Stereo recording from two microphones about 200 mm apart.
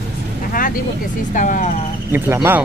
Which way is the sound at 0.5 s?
45° left (ahead or behind).